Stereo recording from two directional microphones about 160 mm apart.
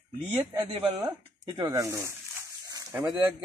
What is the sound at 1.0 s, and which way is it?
Dog, 25° right (ahead or behind).